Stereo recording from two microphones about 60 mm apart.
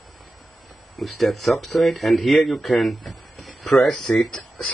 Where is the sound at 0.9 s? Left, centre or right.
Centre.